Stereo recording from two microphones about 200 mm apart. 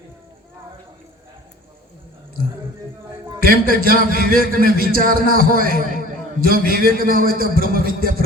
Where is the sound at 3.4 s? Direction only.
45° right (ahead or behind).